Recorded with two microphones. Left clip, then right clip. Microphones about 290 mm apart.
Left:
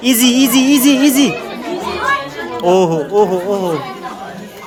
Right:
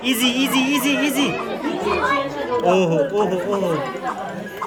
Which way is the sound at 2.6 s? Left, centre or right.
Centre.